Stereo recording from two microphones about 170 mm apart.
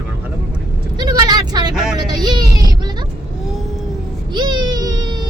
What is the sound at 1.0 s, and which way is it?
Speech, 25° right (ahead or behind).